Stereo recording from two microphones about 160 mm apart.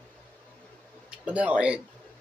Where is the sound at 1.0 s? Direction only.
10° right (ahead or behind).